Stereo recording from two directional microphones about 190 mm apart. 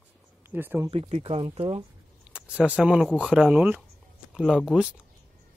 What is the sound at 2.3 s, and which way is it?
Speech, 5° right (ahead or behind).